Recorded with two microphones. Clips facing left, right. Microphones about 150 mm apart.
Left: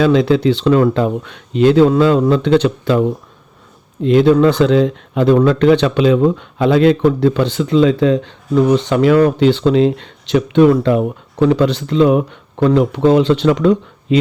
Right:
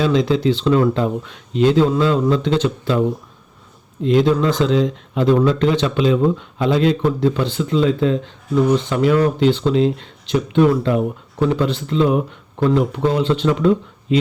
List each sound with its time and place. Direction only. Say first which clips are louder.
0.0 s speech: left 4 dB; 65° left (ahead or behind)
4.0 s speech: left 5 dB; 70° left (ahead or behind); by 14.2 s 85° left